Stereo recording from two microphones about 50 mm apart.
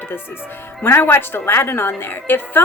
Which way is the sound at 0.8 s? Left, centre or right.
Left.